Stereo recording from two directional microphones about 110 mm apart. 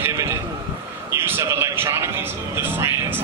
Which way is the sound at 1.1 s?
25° right (ahead or behind).